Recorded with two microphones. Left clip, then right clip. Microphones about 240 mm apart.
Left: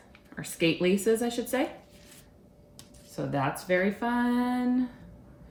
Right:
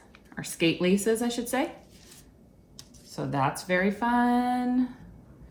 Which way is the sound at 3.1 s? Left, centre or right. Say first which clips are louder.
Right 2 dB; centre.